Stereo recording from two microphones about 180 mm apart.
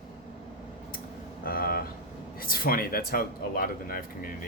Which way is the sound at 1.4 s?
55° left (ahead or behind).